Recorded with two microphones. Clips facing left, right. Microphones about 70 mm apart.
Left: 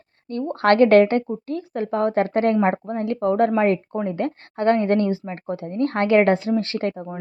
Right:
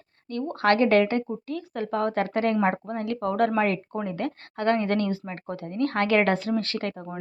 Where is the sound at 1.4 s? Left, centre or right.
Left.